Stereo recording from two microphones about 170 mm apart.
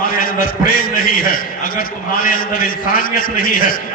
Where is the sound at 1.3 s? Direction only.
55° left (ahead or behind).